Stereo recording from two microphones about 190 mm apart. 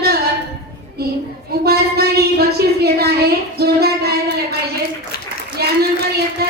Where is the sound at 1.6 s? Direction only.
55° right (ahead or behind).